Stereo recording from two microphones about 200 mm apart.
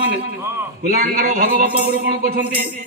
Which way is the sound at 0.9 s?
50° right (ahead or behind).